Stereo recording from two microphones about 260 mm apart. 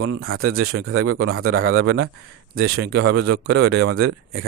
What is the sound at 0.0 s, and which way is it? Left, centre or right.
Speech, right.